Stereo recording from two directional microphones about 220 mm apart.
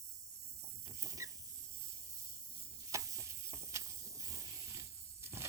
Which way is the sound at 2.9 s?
15° right (ahead or behind).